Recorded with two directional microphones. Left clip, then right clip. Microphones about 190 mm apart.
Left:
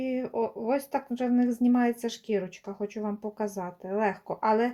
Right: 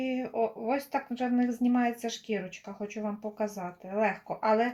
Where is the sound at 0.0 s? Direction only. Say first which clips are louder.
Left 1 dB; 55° left (ahead or behind).